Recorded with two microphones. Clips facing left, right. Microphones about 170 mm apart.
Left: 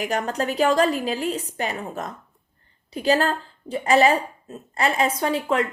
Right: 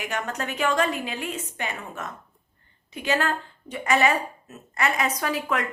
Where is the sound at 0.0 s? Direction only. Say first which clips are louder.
Left 6 dB; 35° left (ahead or behind).